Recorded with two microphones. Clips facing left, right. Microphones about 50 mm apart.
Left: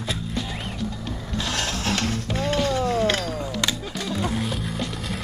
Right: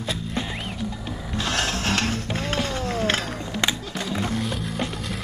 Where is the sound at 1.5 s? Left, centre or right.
Right.